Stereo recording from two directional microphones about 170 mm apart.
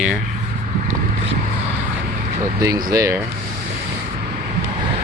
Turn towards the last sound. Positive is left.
turn(degrees=-20)  # may be behind; listen again after turning